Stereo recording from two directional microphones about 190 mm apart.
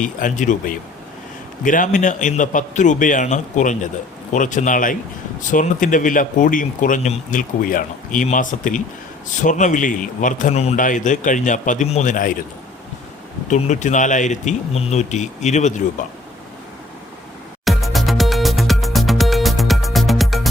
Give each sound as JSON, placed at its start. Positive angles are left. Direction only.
{"t": 0.0, "sound": "a man's voice", "side_deg": 45}
{"t": 13.5, "sound": "a man's voice", "side_deg": 40}
{"t": 17.7, "sound": "music", "side_deg": 0}